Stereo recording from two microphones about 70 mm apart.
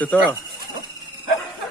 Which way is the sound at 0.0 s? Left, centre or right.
Left.